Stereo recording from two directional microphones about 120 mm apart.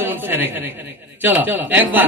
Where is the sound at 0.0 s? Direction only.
15° right (ahead or behind).